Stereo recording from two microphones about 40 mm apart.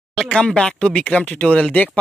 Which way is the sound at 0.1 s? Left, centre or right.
Left.